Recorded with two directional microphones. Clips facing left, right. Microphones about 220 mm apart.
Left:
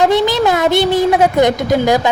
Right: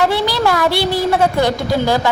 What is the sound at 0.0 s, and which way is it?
A woman's voice, 20° left (ahead or behind).